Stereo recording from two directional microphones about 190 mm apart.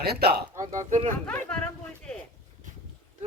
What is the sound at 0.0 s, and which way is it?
Speech, 55° right (ahead or behind).